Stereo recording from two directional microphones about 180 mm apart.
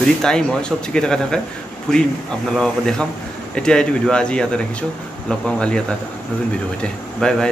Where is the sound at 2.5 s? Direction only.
5° left (ahead or behind).